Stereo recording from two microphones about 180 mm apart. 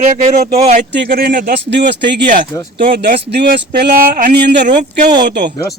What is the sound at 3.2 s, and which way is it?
Speech, 65° right (ahead or behind).